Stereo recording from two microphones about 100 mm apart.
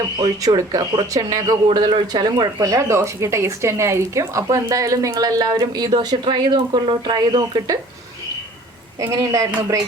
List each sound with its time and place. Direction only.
0.2 s speech: 35° right (ahead or behind)
1.7 s speech: 50° right (ahead or behind)
9.0 s speech: 35° right (ahead or behind)